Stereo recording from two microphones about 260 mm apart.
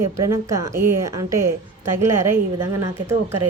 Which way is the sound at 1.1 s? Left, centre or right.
Right.